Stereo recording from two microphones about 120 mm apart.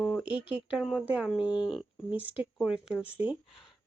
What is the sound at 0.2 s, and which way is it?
A woman's voice, 10° right (ahead or behind).